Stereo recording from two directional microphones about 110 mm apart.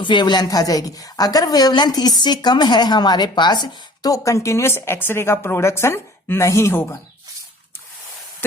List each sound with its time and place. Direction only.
0.0 s speech: 45° left (ahead or behind); by 6.8 s 25° left (ahead or behind)